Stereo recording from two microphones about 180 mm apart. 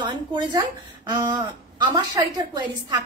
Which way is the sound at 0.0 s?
25° right (ahead or behind).